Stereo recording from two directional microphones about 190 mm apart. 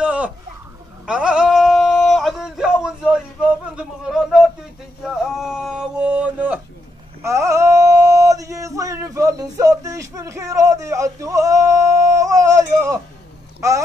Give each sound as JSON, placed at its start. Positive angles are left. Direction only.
{"t": 0.0, "sound": "a sound", "side_deg": -5}
{"t": 7.2, "sound": "male singing", "side_deg": -15}
{"t": 13.6, "sound": "speech", "side_deg": -15}